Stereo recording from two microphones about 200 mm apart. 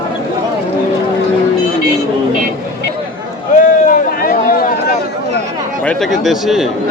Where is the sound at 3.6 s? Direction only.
45° left (ahead or behind).